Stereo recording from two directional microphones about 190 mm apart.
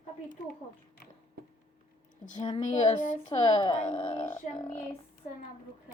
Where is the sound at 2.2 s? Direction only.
40° left (ahead or behind).